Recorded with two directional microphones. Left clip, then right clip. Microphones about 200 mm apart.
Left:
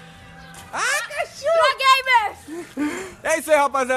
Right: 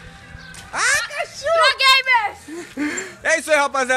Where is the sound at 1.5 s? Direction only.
15° left (ahead or behind).